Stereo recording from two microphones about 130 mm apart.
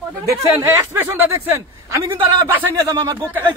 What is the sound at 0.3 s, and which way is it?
Speech, 20° right (ahead or behind).